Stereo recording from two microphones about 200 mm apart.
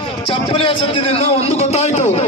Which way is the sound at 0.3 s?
25° left (ahead or behind).